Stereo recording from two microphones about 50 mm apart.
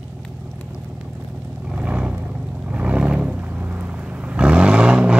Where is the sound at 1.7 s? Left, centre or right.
Right.